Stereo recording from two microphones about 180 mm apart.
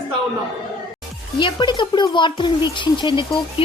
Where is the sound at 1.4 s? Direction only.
25° left (ahead or behind).